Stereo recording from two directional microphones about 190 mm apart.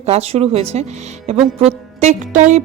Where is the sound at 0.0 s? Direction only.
35° right (ahead or behind).